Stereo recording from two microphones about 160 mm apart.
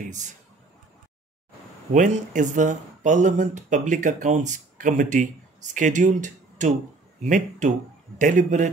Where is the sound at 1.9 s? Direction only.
55° right (ahead or behind).